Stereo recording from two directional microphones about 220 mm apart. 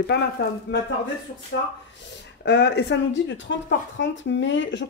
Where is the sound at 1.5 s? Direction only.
50° left (ahead or behind).